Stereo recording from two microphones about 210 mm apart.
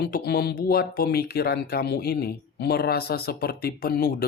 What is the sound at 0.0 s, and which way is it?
Speech, 50° left (ahead or behind).